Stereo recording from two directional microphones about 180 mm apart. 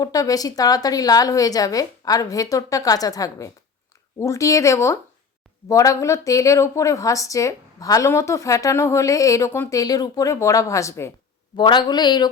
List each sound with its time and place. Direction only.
0.0 s a woman's voice: 20° left (ahead or behind)